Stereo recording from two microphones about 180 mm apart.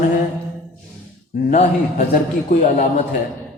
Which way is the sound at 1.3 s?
55° left (ahead or behind).